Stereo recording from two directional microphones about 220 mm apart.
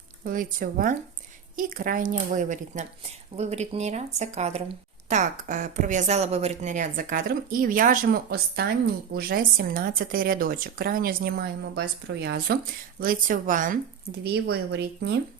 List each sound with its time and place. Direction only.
0.3 s a woman's voice: 40° right (ahead or behind)
14.5 s speech: 50° right (ahead or behind)